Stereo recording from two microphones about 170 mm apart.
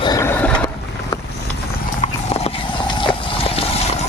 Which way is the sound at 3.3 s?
35° left (ahead or behind).